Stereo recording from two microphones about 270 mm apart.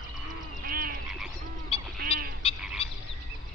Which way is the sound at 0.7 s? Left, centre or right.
Right.